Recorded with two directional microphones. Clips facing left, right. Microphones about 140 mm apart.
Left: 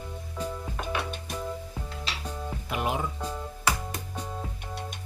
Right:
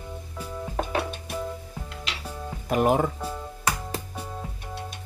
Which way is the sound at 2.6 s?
45° right (ahead or behind).